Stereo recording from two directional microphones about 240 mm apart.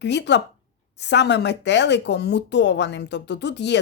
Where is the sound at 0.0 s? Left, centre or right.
Left.